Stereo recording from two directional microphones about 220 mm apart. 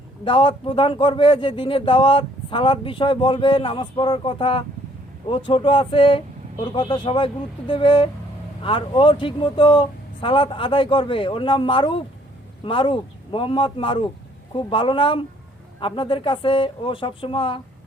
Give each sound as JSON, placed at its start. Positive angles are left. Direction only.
{"t": 0.3, "sound": "speech", "side_deg": 25}